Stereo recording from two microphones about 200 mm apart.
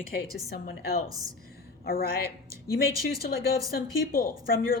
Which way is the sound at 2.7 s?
50° left (ahead or behind).